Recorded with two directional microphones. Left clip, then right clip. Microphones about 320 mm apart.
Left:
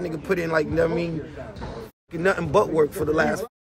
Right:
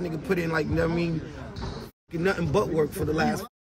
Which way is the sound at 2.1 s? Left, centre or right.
Centre.